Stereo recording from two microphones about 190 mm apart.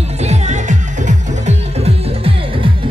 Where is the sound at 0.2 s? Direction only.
35° right (ahead or behind).